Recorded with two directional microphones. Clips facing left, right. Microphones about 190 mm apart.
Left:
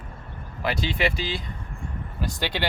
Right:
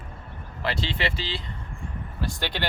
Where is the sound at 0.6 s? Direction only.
15° left (ahead or behind).